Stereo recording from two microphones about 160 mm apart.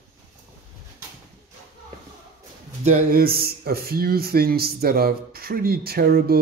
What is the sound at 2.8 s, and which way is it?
Speech, 60° right (ahead or behind).